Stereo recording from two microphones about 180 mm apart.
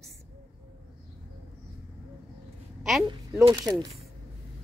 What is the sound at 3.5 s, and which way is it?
Speech, 20° right (ahead or behind).